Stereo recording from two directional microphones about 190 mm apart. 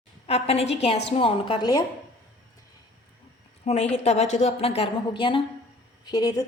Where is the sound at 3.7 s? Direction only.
35° left (ahead or behind).